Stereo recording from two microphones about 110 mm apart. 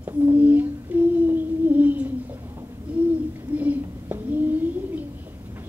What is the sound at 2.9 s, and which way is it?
Hoot, 10° right (ahead or behind).